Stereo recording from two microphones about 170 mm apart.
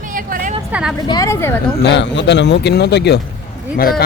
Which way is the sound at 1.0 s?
20° left (ahead or behind).